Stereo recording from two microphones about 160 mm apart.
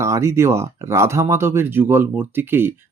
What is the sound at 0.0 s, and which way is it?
Speech, 20° right (ahead or behind).